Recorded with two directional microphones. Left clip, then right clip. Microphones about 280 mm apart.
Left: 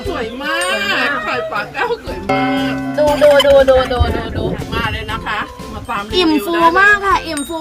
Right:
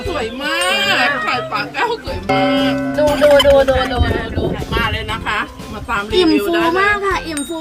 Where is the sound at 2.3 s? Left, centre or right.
Centre.